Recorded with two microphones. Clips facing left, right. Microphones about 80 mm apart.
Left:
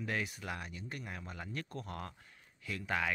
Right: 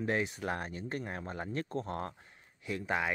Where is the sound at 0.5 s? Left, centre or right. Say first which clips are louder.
Right 6 dB; right.